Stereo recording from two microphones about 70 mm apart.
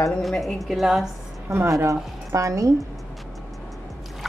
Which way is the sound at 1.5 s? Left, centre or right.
Right.